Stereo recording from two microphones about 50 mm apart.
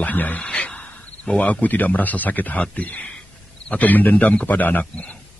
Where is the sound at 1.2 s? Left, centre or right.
Left.